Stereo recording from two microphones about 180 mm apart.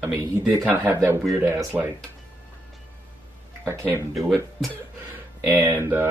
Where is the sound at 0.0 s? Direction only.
15° right (ahead or behind).